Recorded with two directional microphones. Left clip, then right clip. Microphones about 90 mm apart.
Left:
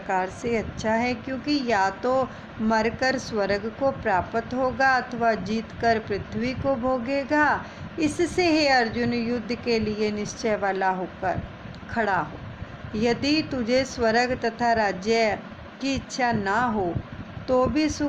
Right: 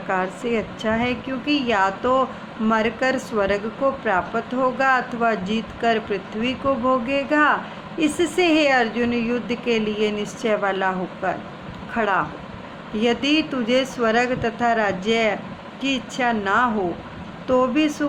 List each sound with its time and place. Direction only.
0.1 s a woman's voice: 55° left (ahead or behind)
3.3 s speech: 75° left (ahead or behind)
4.0 s speech: 65° left (ahead or behind)
11.9 s a woman's voice: 75° left (ahead or behind); by 16.6 s 90° left
17.4 s speech: 65° left (ahead or behind)